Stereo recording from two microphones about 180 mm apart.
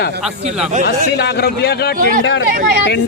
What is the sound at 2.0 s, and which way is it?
Speech, 50° right (ahead or behind).